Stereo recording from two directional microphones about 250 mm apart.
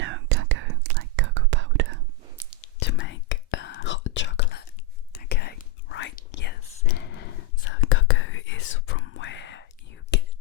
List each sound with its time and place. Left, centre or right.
0.0 s whispering: right
2.8 s whispering: left
7.7 s whispering: left